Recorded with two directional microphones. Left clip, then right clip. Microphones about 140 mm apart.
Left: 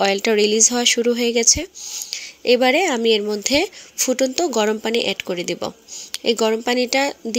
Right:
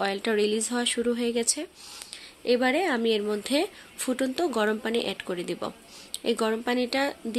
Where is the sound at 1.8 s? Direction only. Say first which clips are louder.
Left 12 dB; 30° left (ahead or behind).